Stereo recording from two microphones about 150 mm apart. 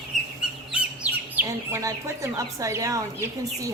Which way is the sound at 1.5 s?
20° right (ahead or behind).